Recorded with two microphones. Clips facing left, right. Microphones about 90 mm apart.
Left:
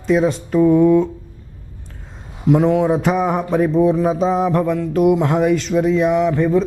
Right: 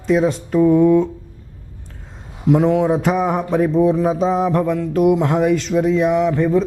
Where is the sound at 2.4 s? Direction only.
20° left (ahead or behind).